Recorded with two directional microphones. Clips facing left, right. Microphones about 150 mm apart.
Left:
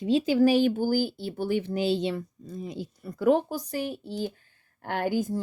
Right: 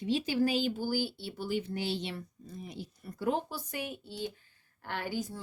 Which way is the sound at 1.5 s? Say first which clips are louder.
Left 6 dB; 70° left (ahead or behind).